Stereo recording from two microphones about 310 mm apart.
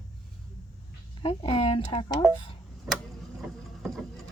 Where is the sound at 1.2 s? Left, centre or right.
Centre.